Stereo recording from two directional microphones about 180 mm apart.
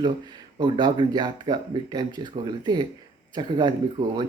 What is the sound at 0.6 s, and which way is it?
Speech, 25° right (ahead or behind).